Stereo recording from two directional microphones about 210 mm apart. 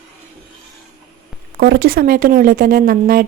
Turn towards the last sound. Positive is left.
turn(degrees=-45)  # may be behind; listen again after turning